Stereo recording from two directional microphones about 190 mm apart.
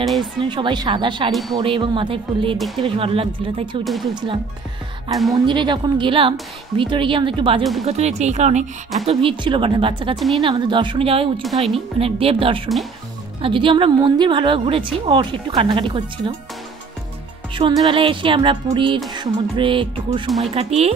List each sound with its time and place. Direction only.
0.0 s speech: centre (ahead or behind)
0.4 s a woman's voice: 25° right (ahead or behind)
1.3 s speech: centre (ahead or behind)
1.6 s a woman's voice: 25° right (ahead or behind)
2.5 s speech: centre (ahead or behind)
2.8 s a woman's voice: 30° right (ahead or behind)
3.8 s speech: centre (ahead or behind)
5.3 s a woman's voice: 25° right (ahead or behind)
10.1 s speech: centre (ahead or behind)
10.4 s a woman's voice: 25° right (ahead or behind)
11.4 s speech: centre (ahead or behind)
11.7 s a woman's voice: 30° right (ahead or behind)
17.6 s a woman's voice: 25° right (ahead or behind)